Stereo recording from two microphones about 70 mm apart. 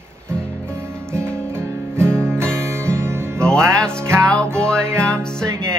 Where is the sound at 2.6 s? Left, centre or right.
Right.